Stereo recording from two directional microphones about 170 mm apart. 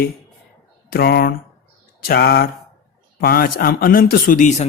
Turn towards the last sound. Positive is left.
turn(degrees=50)  # may be behind; listen again after turning